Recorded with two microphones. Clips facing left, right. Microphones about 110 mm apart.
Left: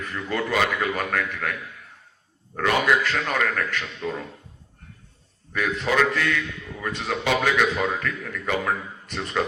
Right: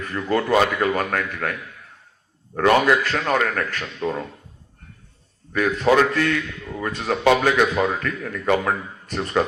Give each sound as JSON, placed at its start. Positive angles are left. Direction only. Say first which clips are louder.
{"t": 0.1, "sound": "a man's voice", "louder": "right 7 dB", "side_deg": -40}
{"t": 2.6, "sound": "a man's voice", "louder": "right 5 dB", "side_deg": -40}
{"t": 5.5, "sound": "a man's voice", "louder": "right 5 dB", "side_deg": -45}